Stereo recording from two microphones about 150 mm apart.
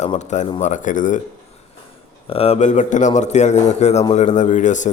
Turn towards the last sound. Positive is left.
turn(degrees=55)  # may be behind; listen again after turning